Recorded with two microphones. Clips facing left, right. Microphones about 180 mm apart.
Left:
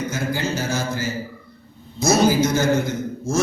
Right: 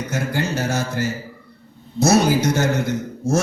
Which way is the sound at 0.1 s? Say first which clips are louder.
Right 1 dB; 65° right (ahead or behind).